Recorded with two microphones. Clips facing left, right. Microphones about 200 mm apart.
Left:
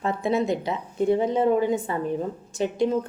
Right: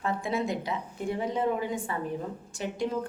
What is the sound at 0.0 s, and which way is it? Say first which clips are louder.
Speech: left 6 dB; 25° left (ahead or behind).